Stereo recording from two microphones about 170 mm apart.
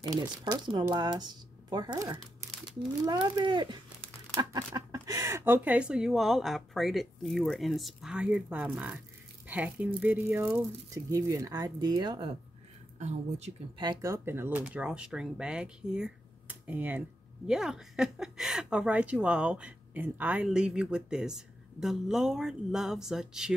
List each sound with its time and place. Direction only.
0.1 s a woman's voice: 25° right (ahead or behind)
13.7 s a woman's voice: 25° right (ahead or behind); by 23.5 s 5° right (ahead or behind)